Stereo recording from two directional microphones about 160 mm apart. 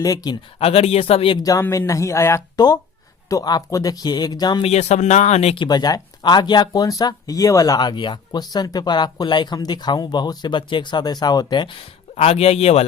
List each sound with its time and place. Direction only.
0.0 s speech: 25° left (ahead or behind)
0.6 s speech: 40° left (ahead or behind)
4.6 s speech: 45° left (ahead or behind)
5.6 s speech: 25° left (ahead or behind); by 12.8 s 40° left (ahead or behind)